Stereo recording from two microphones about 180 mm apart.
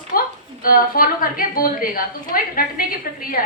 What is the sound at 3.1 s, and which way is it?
Speech, 55° left (ahead or behind).